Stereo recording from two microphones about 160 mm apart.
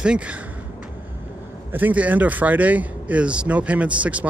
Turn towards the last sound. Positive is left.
turn(degrees=-10)  # may be behind; listen again after turning